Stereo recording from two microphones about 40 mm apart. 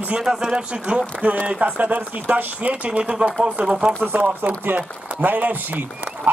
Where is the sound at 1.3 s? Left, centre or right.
Right.